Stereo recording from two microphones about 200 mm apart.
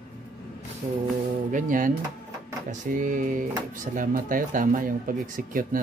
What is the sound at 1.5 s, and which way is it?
Music, 40° right (ahead or behind).